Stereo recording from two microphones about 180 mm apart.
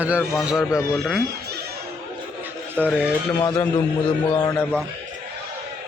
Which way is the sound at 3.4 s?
20° left (ahead or behind).